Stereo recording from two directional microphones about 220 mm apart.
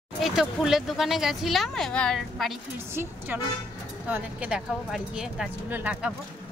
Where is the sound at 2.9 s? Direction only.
10° right (ahead or behind).